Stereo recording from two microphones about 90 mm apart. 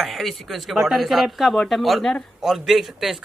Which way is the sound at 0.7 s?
5° right (ahead or behind).